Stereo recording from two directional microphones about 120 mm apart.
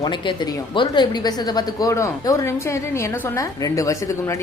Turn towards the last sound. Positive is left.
turn(degrees=25)  # may be behind; listen again after turning